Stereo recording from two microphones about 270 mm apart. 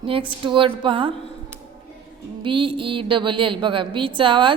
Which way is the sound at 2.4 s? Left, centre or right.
Centre.